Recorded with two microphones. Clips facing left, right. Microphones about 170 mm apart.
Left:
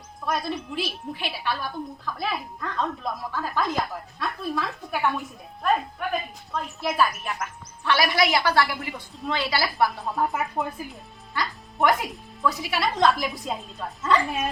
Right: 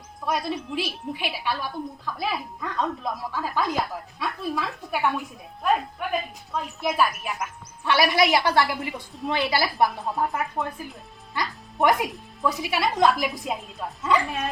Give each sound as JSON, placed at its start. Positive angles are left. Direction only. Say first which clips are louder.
{"t": 0.3, "sound": "a woman's voice", "louder": "right 1 dB", "side_deg": -10}
{"t": 10.0, "sound": "speech", "louder": "even", "side_deg": 0}
{"t": 11.3, "sound": "music", "louder": "right 1 dB", "side_deg": -20}
{"t": 12.5, "sound": "speech", "louder": "right 1 dB", "side_deg": -15}